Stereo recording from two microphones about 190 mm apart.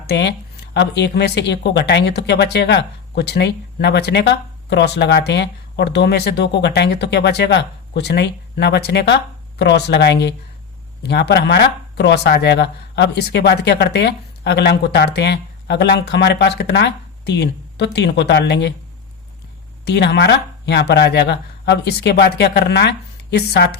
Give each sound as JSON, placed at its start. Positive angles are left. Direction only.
{"t": 0.1, "sound": "speech", "side_deg": 60}
{"t": 19.8, "sound": "speech", "side_deg": 60}